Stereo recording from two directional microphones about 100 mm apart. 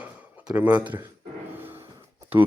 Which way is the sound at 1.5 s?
20° right (ahead or behind).